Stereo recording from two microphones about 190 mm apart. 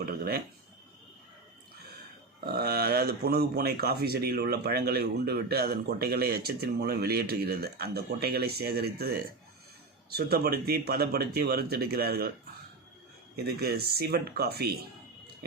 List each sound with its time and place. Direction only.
0.0 s speech: 50° right (ahead or behind)
2.4 s speech: 55° right (ahead or behind)
13.3 s speech: 55° right (ahead or behind)